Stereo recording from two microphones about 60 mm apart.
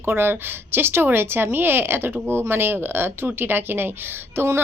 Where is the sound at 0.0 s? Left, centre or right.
Right.